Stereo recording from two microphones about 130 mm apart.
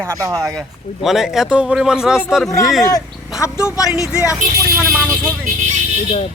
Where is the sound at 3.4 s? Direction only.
20° left (ahead or behind).